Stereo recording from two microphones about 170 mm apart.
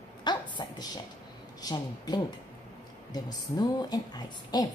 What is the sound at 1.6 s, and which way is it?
A woman's voice, 20° left (ahead or behind).